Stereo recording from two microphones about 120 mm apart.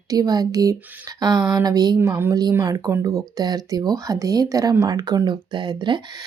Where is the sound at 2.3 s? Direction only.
30° right (ahead or behind).